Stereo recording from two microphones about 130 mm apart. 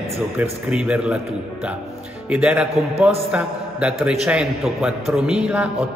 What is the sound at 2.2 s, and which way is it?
A man's voice, 10° right (ahead or behind).